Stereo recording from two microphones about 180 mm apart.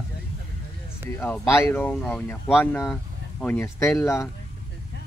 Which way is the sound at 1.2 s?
10° left (ahead or behind).